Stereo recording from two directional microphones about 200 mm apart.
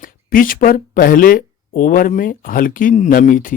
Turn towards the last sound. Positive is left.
turn(degrees=40)  # may be behind; listen again after turning